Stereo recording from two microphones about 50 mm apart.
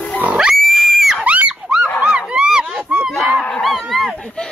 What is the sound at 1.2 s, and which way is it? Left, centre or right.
Dog, right.